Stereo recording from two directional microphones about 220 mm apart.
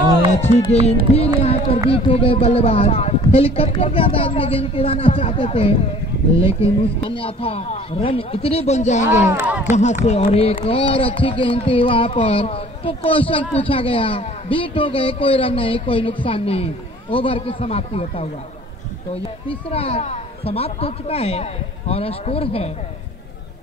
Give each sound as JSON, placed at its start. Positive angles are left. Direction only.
{"t": 0.3, "sound": "a sound", "side_deg": 30}
{"t": 0.7, "sound": "a man's voice", "side_deg": 30}
{"t": 9.2, "sound": "speech", "side_deg": -10}
{"t": 9.7, "sound": "a man's voice", "side_deg": 30}
{"t": 19.7, "sound": "a man's voice", "side_deg": 25}